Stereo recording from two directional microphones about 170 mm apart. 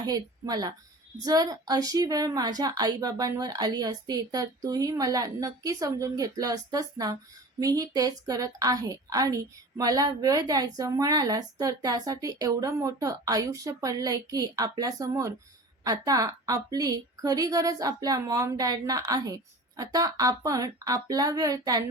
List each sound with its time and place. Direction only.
0.0 s a woman's voice: 25° right (ahead or behind)